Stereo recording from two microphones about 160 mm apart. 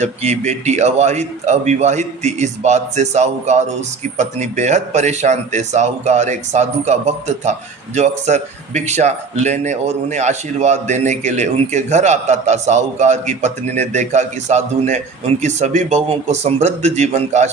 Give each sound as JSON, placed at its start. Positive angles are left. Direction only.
{"t": 0.0, "sound": "speech", "side_deg": -45}